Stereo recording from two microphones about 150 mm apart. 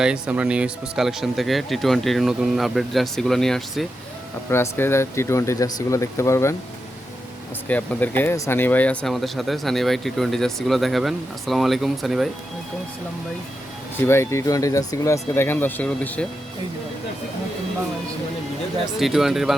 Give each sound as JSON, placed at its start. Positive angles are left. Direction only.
{"t": 0.0, "sound": "speech", "side_deg": -5}
{"t": 4.5, "sound": "speech", "side_deg": 15}
{"t": 7.7, "sound": "speech", "side_deg": 10}
{"t": 14.1, "sound": "speech", "side_deg": 20}
{"t": 18.9, "sound": "speech", "side_deg": 0}